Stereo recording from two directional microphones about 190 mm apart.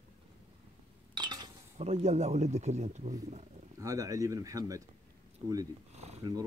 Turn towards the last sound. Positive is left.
turn(degrees=-20)  # may be behind; listen again after turning